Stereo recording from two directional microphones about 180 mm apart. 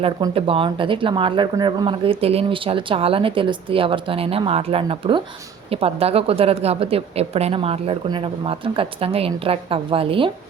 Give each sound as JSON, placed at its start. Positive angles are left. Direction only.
{"t": 0.3, "sound": "a woman's voice", "side_deg": -30}